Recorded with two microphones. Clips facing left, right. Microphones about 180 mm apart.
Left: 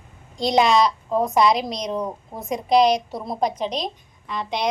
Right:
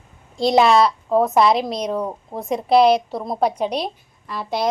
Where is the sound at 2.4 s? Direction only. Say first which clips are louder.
Right 2 dB; centre (ahead or behind).